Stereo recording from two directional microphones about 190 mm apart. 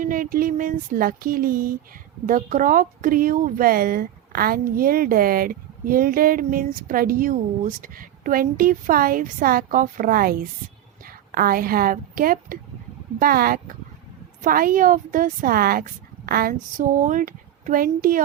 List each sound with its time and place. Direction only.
0.0 s a woman's voice: 45° right (ahead or behind)